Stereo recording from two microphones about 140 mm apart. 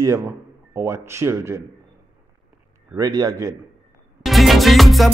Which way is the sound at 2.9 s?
25° right (ahead or behind).